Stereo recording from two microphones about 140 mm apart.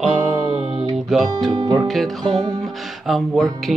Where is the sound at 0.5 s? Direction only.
45° right (ahead or behind).